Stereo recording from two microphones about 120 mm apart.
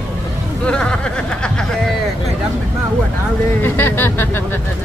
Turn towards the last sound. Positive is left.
turn(degrees=20)  # may be behind; listen again after turning